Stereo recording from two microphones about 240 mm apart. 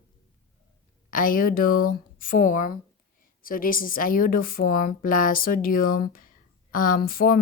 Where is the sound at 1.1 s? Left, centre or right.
Left.